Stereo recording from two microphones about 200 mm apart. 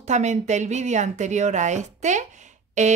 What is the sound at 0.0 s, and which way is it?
Speech, 35° right (ahead or behind).